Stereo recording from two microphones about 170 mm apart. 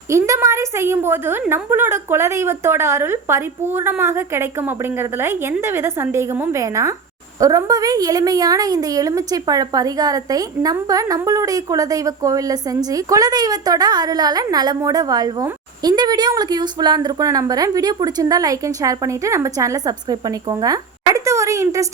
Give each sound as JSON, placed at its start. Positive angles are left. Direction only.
{"t": 0.1, "sound": "a woman's voice", "side_deg": -15}